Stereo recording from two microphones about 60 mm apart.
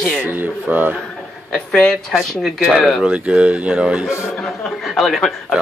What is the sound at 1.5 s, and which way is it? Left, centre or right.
Speech, centre.